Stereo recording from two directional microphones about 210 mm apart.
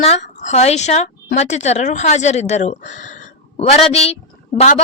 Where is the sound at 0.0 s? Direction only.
30° left (ahead or behind).